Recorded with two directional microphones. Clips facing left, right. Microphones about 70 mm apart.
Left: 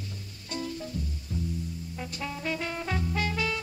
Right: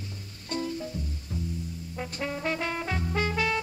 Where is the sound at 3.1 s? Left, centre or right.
Right.